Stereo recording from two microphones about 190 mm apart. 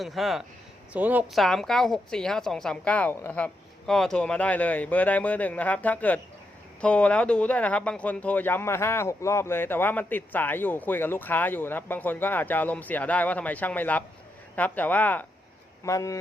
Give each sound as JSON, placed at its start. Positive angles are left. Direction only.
{"t": 0.0, "sound": "speech", "side_deg": 0}